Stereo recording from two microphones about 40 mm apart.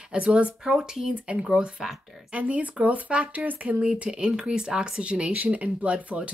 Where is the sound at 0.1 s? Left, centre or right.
Right.